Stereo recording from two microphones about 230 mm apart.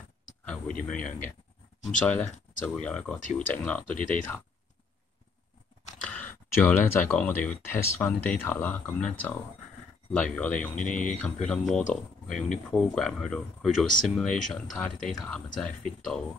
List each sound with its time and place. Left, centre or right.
0.7 s speech: centre
3.9 s speech: left
5.9 s speech: centre
10.8 s speech: left
11.1 s speech: centre